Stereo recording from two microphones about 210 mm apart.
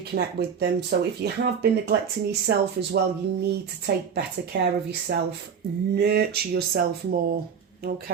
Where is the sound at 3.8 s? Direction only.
50° right (ahead or behind).